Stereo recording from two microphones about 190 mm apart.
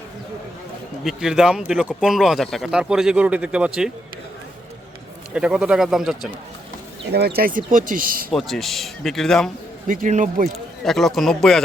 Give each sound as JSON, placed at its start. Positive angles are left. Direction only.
{"t": 1.0, "sound": "speech", "side_deg": -5}
{"t": 5.3, "sound": "speech", "side_deg": -5}
{"t": 7.0, "sound": "speech", "side_deg": -60}
{"t": 8.3, "sound": "speech", "side_deg": 0}
{"t": 9.8, "sound": "speech", "side_deg": -45}
{"t": 10.8, "sound": "speech", "side_deg": 0}